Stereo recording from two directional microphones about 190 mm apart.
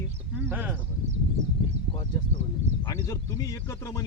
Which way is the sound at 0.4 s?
10° right (ahead or behind).